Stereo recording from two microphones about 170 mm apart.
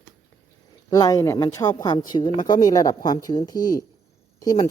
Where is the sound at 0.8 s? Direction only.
20° left (ahead or behind).